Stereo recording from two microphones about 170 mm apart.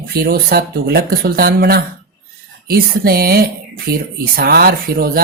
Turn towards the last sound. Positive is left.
turn(degrees=-60)  # may be behind; listen again after turning